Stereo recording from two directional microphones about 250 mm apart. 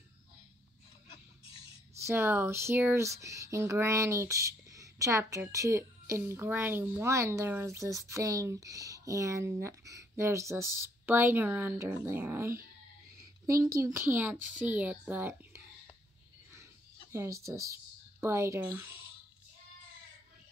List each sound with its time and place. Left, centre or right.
1.0 s pig: left
2.0 s speech: centre
17.1 s speech: centre